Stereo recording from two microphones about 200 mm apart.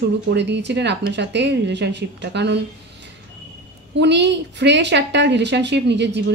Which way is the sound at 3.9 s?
60° right (ahead or behind).